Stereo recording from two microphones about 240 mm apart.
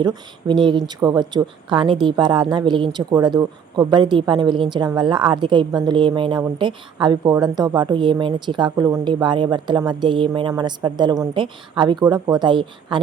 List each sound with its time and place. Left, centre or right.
0.0 s a woman's voice: centre